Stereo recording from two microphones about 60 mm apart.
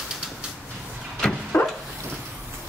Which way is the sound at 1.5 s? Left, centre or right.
Left.